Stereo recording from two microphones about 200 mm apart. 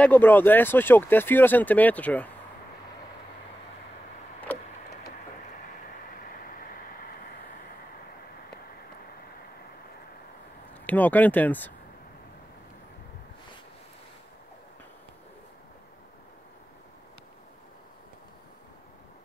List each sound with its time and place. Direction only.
0.0 s speech: 10° left (ahead or behind)
6.1 s vehicle: 45° left (ahead or behind)
10.7 s speech: 10° left (ahead or behind)